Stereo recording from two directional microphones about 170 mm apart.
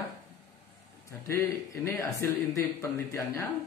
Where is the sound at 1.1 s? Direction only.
15° left (ahead or behind).